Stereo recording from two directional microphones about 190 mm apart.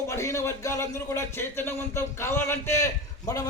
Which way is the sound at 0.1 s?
15° left (ahead or behind).